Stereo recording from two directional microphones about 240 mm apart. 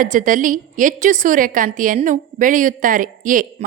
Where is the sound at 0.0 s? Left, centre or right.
Right.